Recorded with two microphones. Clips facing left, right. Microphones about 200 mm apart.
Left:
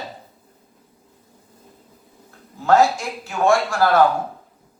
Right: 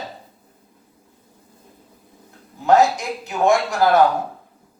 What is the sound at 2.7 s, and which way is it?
A man's voice, 20° right (ahead or behind).